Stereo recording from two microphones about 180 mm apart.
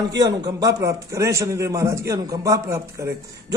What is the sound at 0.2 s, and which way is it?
A man's voice, 20° right (ahead or behind).